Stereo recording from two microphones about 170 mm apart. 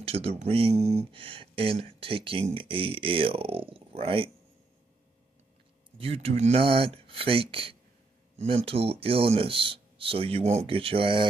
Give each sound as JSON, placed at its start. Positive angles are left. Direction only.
{"t": 0.0, "sound": "speech", "side_deg": -35}
{"t": 5.9, "sound": "speech", "side_deg": -35}